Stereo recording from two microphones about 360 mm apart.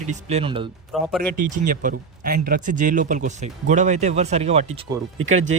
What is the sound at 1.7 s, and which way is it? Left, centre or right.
Speech, right.